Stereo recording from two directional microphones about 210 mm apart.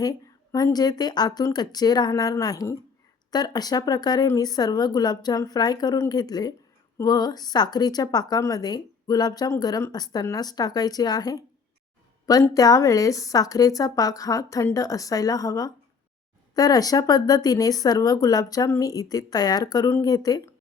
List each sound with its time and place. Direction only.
0.0 s a woman's voice: 20° left (ahead or behind)